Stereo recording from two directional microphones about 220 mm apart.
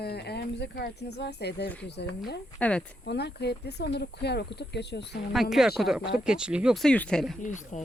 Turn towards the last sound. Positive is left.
turn(degrees=35)  # may be behind; listen again after turning